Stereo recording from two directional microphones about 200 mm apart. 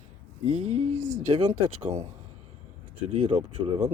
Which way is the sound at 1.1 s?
25° right (ahead or behind).